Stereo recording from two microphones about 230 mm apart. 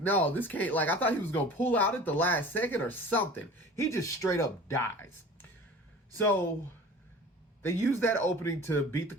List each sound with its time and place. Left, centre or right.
0.0 s speech: centre
7.6 s speech: centre